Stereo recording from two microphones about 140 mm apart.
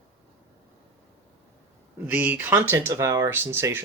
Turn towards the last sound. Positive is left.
turn(degrees=-15)  # may be behind; listen again after turning